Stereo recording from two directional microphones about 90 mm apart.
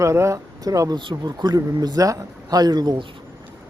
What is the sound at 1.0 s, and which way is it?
Speech, 60° right (ahead or behind).